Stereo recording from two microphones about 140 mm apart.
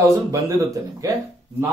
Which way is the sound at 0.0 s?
20° right (ahead or behind).